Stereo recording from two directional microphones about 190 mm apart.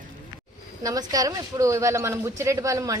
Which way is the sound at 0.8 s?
20° right (ahead or behind).